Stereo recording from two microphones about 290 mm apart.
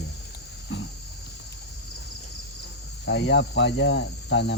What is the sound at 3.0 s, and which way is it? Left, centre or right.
Cricket, left.